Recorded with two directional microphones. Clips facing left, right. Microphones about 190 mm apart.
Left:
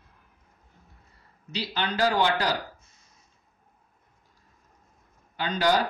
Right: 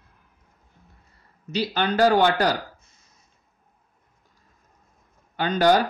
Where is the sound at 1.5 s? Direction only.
50° right (ahead or behind).